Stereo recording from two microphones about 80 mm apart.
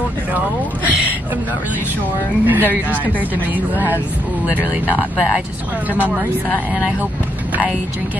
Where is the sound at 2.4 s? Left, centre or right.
Right.